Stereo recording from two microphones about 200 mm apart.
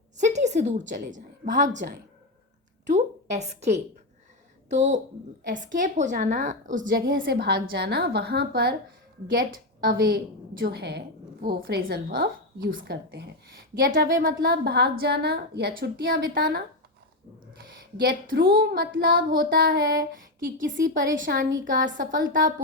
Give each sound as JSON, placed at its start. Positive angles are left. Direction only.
{"t": 0.2, "sound": "a woman's voice", "side_deg": -35}
{"t": 2.8, "sound": "a sound", "side_deg": -35}
{"t": 4.7, "sound": "a woman's voice", "side_deg": -35}
{"t": 17.9, "sound": "a woman's voice", "side_deg": -50}